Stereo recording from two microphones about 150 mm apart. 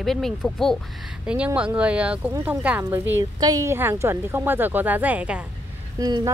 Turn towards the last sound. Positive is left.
turn(degrees=-25)  # may be behind; listen again after turning